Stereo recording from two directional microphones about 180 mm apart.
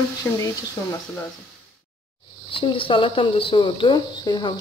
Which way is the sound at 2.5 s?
30° left (ahead or behind).